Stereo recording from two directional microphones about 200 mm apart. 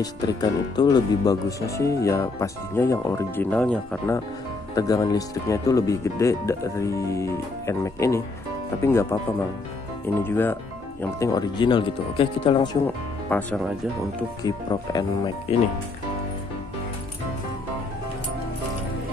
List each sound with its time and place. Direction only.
0.0 s speech: 20° left (ahead or behind)
4.7 s speech: 20° left (ahead or behind)
10.2 s speech: 10° left (ahead or behind)
12.8 s speech: 10° left (ahead or behind)
14.4 s speech: 20° left (ahead or behind)